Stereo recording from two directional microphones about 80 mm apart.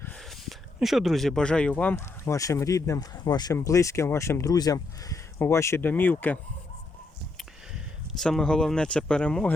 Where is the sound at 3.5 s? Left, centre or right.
Left.